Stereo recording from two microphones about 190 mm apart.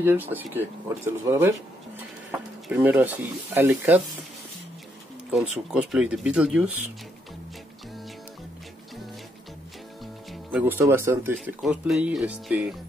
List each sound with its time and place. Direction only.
0.0 s speech: 10° right (ahead or behind)
2.7 s speech: 10° right (ahead or behind)
5.3 s speech: centre (ahead or behind)
10.5 s speech: 10° right (ahead or behind)